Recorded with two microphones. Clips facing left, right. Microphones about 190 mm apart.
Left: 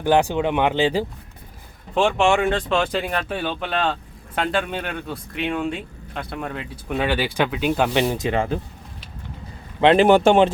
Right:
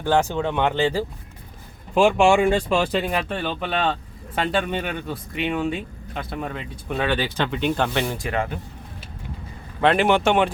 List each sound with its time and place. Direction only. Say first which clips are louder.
0.0 s speech: left 2 dB; 15° left (ahead or behind)
2.4 s speech: right 1 dB; 10° right (ahead or behind); by 7.9 s 5° left (ahead or behind)
7.9 s speech: left 4 dB; 20° left (ahead or behind)
9.8 s speech: left 4 dB; 25° left (ahead or behind)
10.1 s speech: left 5 dB; 35° left (ahead or behind)